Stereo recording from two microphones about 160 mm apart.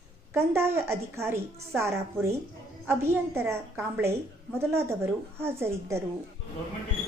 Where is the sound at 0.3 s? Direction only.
15° right (ahead or behind).